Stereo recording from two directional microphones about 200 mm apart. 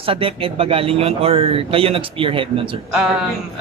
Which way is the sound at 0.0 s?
25° right (ahead or behind).